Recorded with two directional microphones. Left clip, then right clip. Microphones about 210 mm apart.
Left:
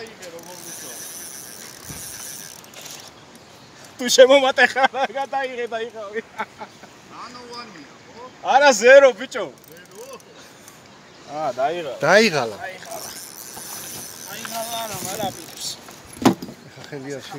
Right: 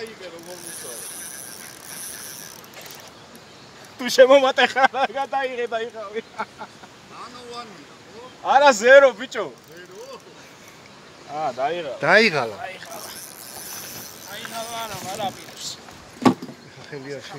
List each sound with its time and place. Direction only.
4.0 s speech: 30° left (ahead or behind); by 6.5 s 5° left (ahead or behind)
8.5 s a man's voice: 35° left (ahead or behind)
11.3 s a man's voice: 40° left (ahead or behind)
12.0 s speech: 20° left (ahead or behind)
12.6 s a sound: 30° left (ahead or behind)
14.3 s vehicle: 45° left (ahead or behind)
16.9 s speech: 30° left (ahead or behind)